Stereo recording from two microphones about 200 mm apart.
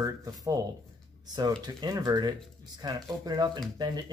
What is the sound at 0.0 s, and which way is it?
Speech, 15° right (ahead or behind).